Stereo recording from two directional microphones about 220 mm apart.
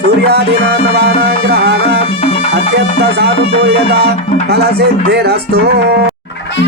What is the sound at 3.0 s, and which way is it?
Music, 45° right (ahead or behind).